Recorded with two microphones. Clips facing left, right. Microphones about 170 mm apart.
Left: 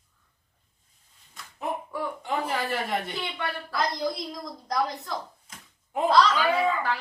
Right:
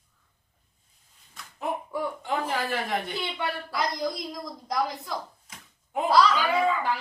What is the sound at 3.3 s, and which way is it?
Speech, 10° right (ahead or behind).